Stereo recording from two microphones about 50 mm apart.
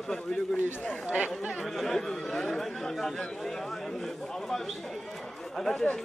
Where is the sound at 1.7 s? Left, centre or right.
Centre.